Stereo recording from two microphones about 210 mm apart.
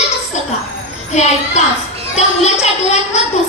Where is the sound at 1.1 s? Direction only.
30° left (ahead or behind).